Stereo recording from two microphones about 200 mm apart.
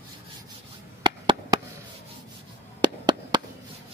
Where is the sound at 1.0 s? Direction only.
20° right (ahead or behind).